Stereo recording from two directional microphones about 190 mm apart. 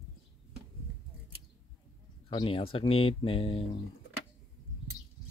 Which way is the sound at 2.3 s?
25° left (ahead or behind).